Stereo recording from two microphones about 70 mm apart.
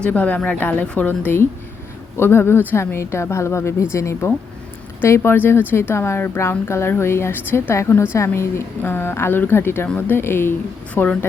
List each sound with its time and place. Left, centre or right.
0.0 s a woman's voice: left
10.9 s a woman's voice: left